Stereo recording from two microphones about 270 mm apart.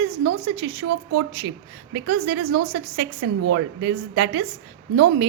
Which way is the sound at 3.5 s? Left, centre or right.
Right.